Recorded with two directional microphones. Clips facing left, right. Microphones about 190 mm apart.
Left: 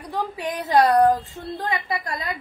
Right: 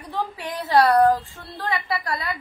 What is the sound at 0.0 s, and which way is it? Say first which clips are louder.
A woman's voice: left 2 dB; 15° left (ahead or behind).